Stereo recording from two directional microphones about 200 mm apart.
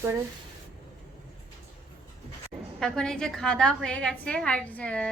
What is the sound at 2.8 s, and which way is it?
A woman's voice, 5° left (ahead or behind).